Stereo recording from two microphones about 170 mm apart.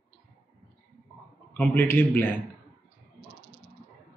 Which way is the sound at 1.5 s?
10° left (ahead or behind).